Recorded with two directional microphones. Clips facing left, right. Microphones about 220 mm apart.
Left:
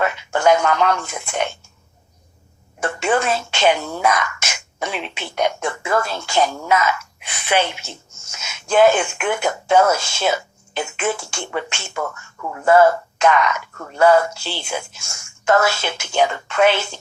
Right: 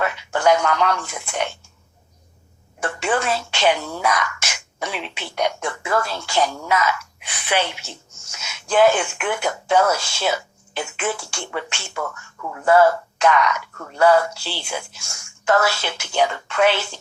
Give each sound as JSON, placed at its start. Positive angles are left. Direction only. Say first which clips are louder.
{"t": 0.0, "sound": "a woman's voice", "louder": "left 2 dB", "side_deg": 25}
{"t": 2.8, "sound": "speech", "louder": "left 3 dB", "side_deg": 25}